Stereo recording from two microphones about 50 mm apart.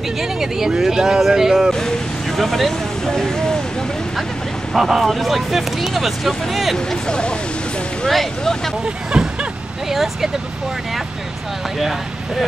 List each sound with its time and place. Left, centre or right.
0.2 s speech: centre
1.7 s speech: centre
4.7 s speech: centre
7.1 s speech: centre
8.1 s speech: centre
9.1 s speech: centre